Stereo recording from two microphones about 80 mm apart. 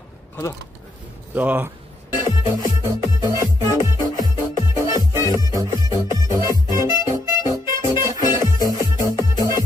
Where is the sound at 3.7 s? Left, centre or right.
Left.